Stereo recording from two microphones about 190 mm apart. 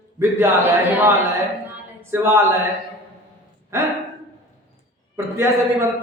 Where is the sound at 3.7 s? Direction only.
15° right (ahead or behind).